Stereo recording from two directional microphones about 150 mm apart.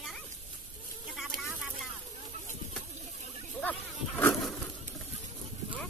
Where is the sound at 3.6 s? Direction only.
10° left (ahead or behind).